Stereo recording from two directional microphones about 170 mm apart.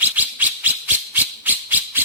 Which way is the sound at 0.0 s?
10° right (ahead or behind).